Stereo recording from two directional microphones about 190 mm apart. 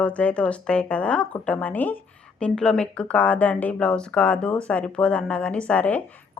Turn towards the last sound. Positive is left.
turn(degrees=5)  # may be behind; listen again after turning